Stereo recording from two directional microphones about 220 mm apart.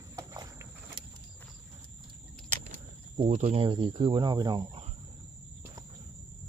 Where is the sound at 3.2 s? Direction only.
30° right (ahead or behind).